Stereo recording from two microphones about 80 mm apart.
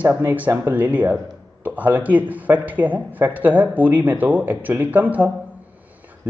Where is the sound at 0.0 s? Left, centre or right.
Right.